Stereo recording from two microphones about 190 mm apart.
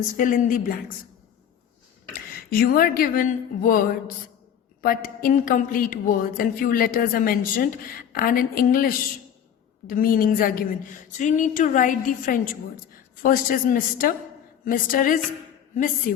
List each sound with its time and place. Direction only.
0.2 s a woman's voice: 45° left (ahead or behind)
2.5 s a woman's voice: 50° left (ahead or behind)